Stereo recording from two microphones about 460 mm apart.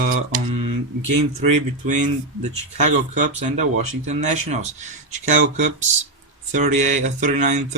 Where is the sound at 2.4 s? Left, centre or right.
Centre.